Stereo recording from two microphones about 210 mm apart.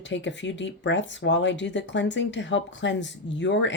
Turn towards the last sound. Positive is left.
turn(degrees=60)  # may be behind; listen again after turning